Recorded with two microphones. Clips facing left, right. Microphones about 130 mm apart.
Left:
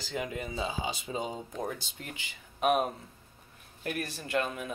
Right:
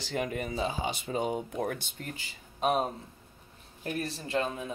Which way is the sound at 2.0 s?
40° right (ahead or behind).